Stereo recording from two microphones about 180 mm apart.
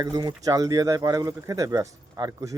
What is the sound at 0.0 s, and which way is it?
Speech, 20° right (ahead or behind).